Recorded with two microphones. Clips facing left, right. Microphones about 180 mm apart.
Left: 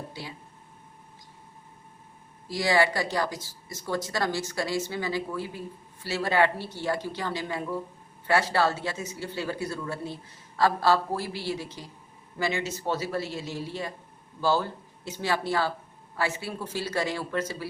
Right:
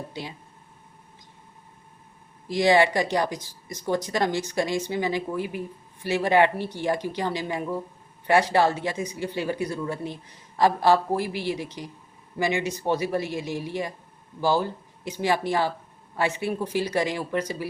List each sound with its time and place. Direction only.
0.1 s speech: 20° right (ahead or behind)
2.5 s speech: 20° right (ahead or behind)